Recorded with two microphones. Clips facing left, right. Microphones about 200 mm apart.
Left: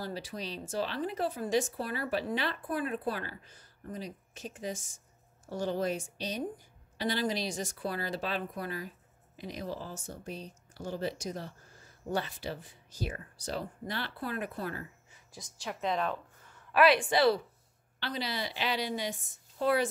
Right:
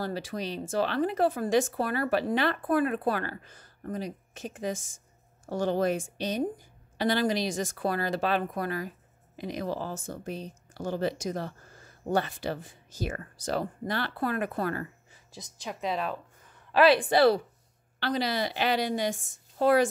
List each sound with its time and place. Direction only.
0.0 s speech: 65° right (ahead or behind)
4.6 s speech: 90° right
5.5 s speech: 60° right (ahead or behind); by 10.1 s 80° right
10.7 s speech: 90° right; by 11.5 s 65° right (ahead or behind)
12.1 s speech: 50° right (ahead or behind)
12.9 s speech: 90° right; by 14.9 s 65° right (ahead or behind)
15.3 s speech: 20° right (ahead or behind)
16.7 s speech: 30° right (ahead or behind); by 19.1 s 50° right (ahead or behind)